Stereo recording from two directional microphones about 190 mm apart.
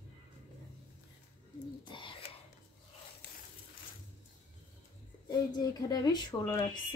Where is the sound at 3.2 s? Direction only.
65° left (ahead or behind).